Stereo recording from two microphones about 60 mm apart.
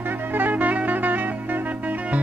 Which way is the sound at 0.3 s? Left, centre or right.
Right.